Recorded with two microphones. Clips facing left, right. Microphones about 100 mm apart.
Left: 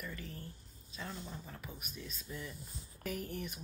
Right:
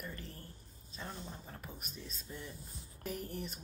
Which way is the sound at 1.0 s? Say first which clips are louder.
Left 1 dB; 25° right (ahead or behind).